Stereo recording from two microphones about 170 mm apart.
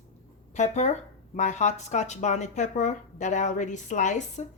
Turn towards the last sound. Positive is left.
turn(degrees=45)  # may be behind; listen again after turning